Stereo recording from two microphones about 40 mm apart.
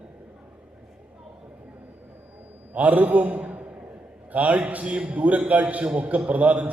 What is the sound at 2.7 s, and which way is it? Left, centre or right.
A man's voice, right.